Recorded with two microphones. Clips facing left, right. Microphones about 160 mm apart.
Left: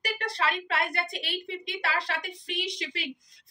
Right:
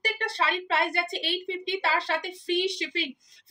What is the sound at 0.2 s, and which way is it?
A woman's voice, 30° right (ahead or behind).